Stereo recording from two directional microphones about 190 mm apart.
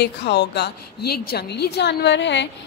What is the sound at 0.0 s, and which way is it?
A woman's voice, 60° left (ahead or behind).